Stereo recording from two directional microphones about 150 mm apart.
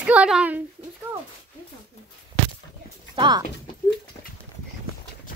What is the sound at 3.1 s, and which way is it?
Speech, 30° right (ahead or behind).